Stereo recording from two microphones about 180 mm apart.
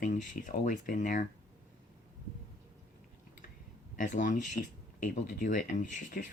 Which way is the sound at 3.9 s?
45° left (ahead or behind).